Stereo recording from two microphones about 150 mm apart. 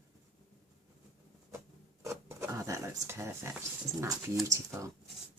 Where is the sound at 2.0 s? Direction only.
20° right (ahead or behind).